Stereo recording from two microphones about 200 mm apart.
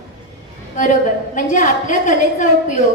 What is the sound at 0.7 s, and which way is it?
A woman's voice, 40° left (ahead or behind).